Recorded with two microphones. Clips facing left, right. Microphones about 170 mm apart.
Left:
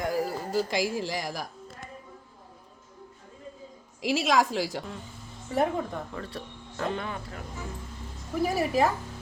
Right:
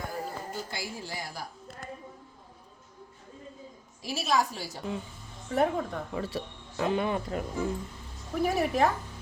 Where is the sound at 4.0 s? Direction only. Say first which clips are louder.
Left 4 dB; 90° left.